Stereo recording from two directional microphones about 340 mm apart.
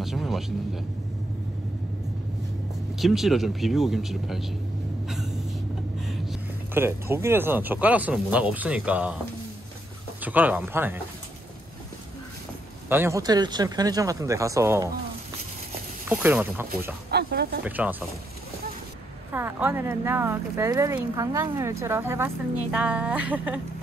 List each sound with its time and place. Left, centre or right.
0.0 s speech: centre
3.0 s speech: centre
5.0 s a sound: centre
5.9 s speech: centre
10.2 s speech: centre
12.8 s speech: centre
16.1 s speech: centre
17.1 s speech: right
17.6 s speech: centre
19.3 s speech: centre